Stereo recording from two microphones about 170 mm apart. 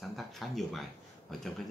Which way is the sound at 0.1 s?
Centre (ahead or behind).